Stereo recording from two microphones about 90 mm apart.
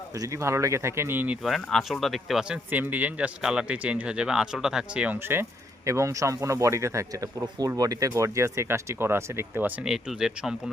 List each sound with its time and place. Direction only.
0.2 s speech: 35° right (ahead or behind)
1.5 s speech: centre (ahead or behind)
2.6 s speech: 20° right (ahead or behind)
5.3 s speech: 30° right (ahead or behind)
9.8 s speech: 5° right (ahead or behind)